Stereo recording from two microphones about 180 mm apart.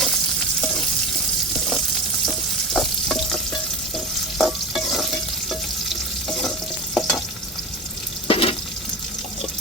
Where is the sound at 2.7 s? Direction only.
Centre (ahead or behind).